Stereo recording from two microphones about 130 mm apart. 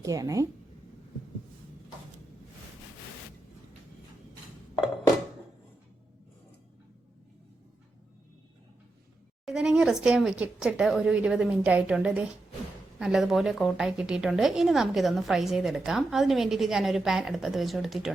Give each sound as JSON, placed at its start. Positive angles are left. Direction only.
{"t": 0.0, "sound": "speech", "side_deg": -25}
{"t": 9.5, "sound": "a woman's voice", "side_deg": -5}